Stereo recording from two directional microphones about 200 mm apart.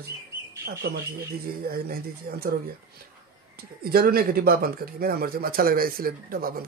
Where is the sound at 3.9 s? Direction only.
50° right (ahead or behind).